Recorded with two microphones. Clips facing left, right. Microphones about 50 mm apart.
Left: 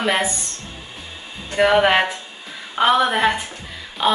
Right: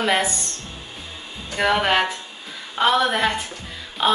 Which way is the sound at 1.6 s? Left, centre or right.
Centre.